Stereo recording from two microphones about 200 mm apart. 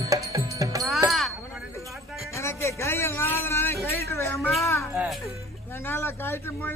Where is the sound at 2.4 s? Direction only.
15° left (ahead or behind).